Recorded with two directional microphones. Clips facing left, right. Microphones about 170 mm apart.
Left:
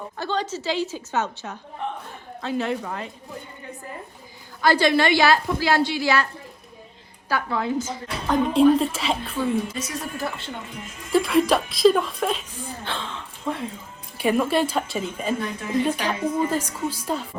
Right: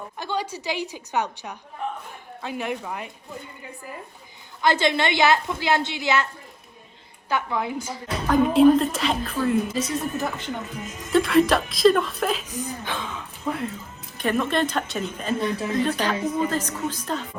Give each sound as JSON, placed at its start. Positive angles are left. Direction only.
{"t": 0.2, "sound": "a woman's voice", "side_deg": -10}
{"t": 1.8, "sound": "a sound", "side_deg": -5}
{"t": 2.4, "sound": "a woman's voice", "side_deg": -15}
{"t": 4.6, "sound": "a woman's voice", "side_deg": -20}
{"t": 7.3, "sound": "a woman's voice", "side_deg": -20}
{"t": 8.5, "sound": "speech", "side_deg": 0}
{"t": 9.7, "sound": "a woman's voice", "side_deg": -30}
{"t": 10.7, "sound": "speech", "side_deg": 0}
{"t": 14.2, "sound": "a woman's voice", "side_deg": 10}
{"t": 15.4, "sound": "speech", "side_deg": -30}
{"t": 15.7, "sound": "a woman's voice", "side_deg": 10}